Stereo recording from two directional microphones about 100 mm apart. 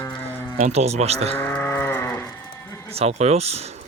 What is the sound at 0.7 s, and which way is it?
Speech, 90° right.